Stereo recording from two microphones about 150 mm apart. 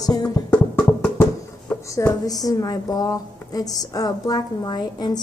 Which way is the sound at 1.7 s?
20° left (ahead or behind).